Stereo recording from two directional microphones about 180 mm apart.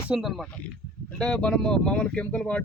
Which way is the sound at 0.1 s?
Centre (ahead or behind).